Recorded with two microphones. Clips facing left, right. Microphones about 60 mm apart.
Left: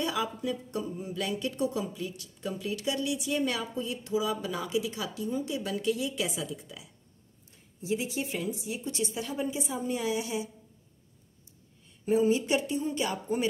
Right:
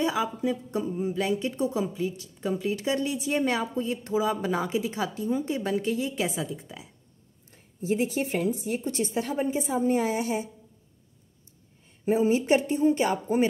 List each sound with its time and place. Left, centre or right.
0.0 s a woman's voice: right
7.5 s a woman's voice: right
12.0 s a woman's voice: right